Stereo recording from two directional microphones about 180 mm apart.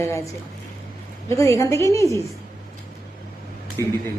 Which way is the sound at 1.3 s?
15° left (ahead or behind).